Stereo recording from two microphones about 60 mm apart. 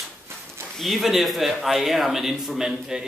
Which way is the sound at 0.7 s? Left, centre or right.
Centre.